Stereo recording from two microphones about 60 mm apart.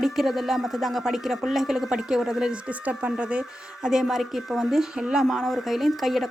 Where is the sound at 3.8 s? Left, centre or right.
Centre.